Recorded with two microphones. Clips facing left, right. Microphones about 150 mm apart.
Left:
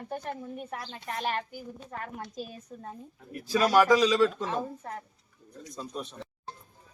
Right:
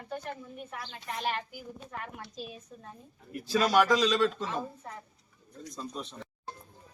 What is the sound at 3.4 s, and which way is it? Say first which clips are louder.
Speech: left 3 dB; 10° left (ahead or behind).